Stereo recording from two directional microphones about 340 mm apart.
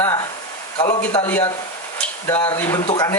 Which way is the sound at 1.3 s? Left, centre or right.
Centre.